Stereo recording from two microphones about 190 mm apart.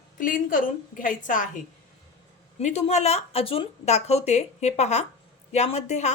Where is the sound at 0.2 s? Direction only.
45° left (ahead or behind).